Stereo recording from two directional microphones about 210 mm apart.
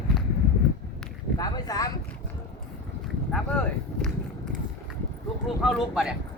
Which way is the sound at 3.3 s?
5° left (ahead or behind).